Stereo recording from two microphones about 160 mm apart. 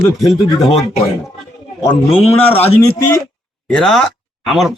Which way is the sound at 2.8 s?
15° left (ahead or behind).